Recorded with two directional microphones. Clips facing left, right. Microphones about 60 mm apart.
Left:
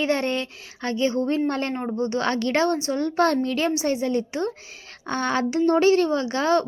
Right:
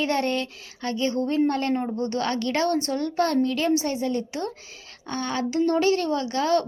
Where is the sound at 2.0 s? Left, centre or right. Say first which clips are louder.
Left 2 dB; left.